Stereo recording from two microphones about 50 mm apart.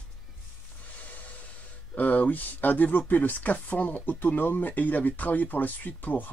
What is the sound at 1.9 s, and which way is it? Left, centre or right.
Speech, left.